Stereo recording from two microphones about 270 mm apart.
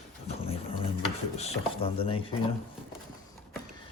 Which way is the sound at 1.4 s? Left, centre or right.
Left.